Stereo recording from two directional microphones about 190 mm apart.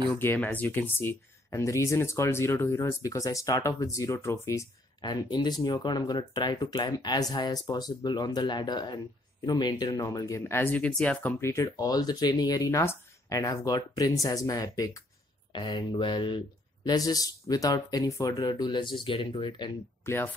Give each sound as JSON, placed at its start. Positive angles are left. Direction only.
{"t": 0.1, "sound": "speech", "side_deg": 10}